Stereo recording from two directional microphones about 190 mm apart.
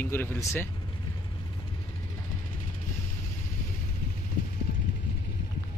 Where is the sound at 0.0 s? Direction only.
10° left (ahead or behind).